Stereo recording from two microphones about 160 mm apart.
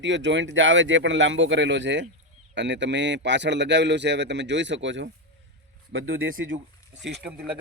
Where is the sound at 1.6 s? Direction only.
90° right.